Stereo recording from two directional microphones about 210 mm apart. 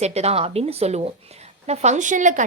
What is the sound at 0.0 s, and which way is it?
Speech, 30° right (ahead or behind).